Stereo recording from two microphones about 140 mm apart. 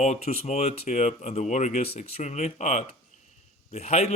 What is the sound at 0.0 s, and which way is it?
A man's voice, 55° left (ahead or behind).